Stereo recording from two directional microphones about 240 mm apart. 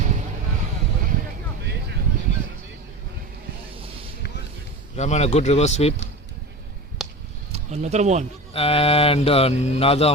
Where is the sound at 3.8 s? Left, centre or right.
Right.